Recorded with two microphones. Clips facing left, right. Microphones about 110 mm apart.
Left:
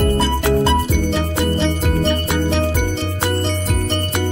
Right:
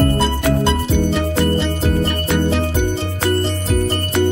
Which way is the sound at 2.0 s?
5° right (ahead or behind).